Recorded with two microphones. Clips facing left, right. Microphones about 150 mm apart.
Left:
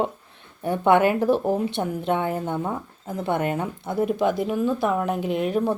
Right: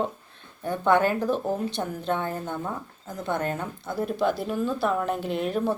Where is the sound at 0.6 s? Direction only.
20° left (ahead or behind).